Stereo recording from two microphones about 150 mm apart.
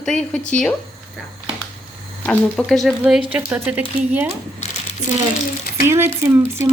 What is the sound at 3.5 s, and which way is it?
Speech, 10° right (ahead or behind).